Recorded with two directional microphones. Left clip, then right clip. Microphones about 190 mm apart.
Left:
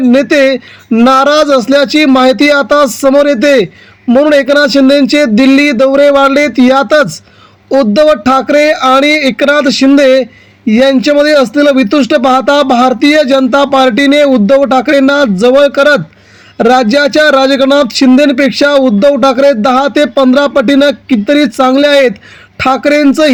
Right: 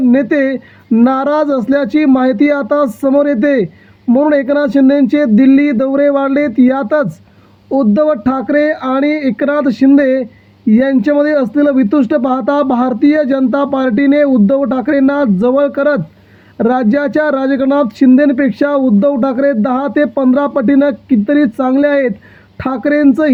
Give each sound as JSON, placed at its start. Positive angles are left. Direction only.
{"t": 0.1, "sound": "speech", "side_deg": 30}